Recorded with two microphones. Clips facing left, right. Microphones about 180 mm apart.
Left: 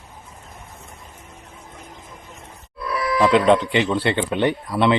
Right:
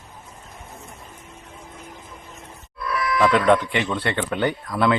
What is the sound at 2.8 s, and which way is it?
A man's voice, 30° left (ahead or behind).